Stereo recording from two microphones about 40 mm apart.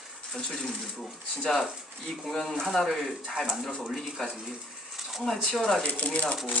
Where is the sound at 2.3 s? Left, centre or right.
Centre.